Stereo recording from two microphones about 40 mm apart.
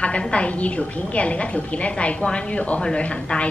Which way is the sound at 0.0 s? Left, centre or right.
Left.